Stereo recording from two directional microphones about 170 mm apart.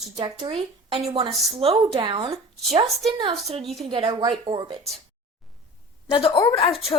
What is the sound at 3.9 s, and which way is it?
Speech, 25° right (ahead or behind).